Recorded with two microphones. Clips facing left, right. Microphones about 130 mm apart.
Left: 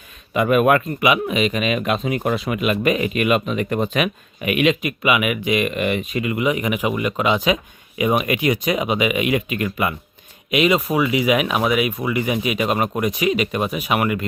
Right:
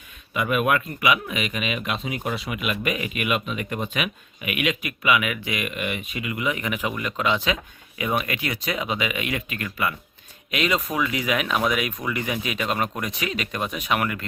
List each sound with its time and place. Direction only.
0.3 s speech: 45° left (ahead or behind)
1.0 s speech: 25° left (ahead or behind)
1.5 s speech: 45° left (ahead or behind)
2.6 s speech: 35° left (ahead or behind)
4.5 s speech: 30° left (ahead or behind)
5.6 s speech: 40° left (ahead or behind)
6.3 s speech: 20° left (ahead or behind)